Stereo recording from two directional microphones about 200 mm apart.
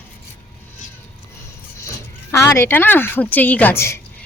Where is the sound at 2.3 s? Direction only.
15° left (ahead or behind).